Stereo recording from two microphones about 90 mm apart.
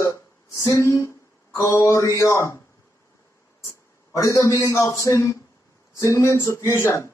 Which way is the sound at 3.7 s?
35° left (ahead or behind).